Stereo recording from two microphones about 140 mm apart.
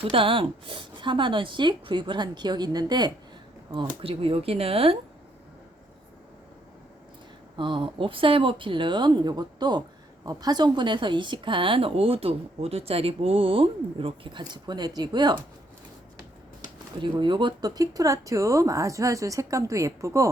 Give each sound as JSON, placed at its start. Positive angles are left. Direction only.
{"t": 0.0, "sound": "speech", "side_deg": -40}
{"t": 3.8, "sound": "speech", "side_deg": -40}
{"t": 7.5, "sound": "speech", "side_deg": -35}
{"t": 17.0, "sound": "speech", "side_deg": -35}